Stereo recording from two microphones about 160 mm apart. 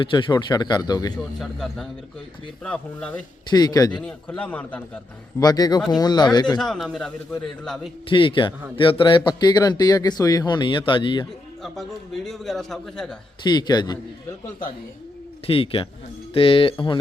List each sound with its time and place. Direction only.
0.0 s speech: 30° left (ahead or behind)
1.4 s a man's voice: centre (ahead or behind)
3.5 s speech: 25° left (ahead or behind)
3.9 s a man's voice: 5° left (ahead or behind)
5.4 s speech: 25° left (ahead or behind)
6.6 s a man's voice: centre (ahead or behind)
8.1 s a man's voice: 30° left (ahead or behind)
11.6 s a man's voice: centre (ahead or behind)
13.4 s speech: 25° left (ahead or behind)
15.4 s a man's voice: 35° left (ahead or behind)